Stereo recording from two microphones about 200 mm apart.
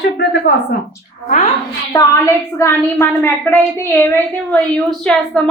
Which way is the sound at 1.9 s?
15° left (ahead or behind).